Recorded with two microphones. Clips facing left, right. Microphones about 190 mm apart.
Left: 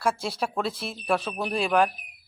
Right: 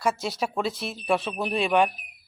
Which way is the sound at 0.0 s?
Centre (ahead or behind).